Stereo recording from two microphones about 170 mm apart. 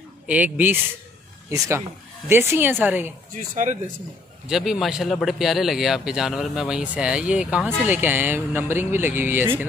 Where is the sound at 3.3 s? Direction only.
45° right (ahead or behind).